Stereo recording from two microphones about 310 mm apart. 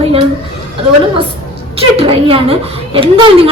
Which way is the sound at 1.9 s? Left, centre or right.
Centre.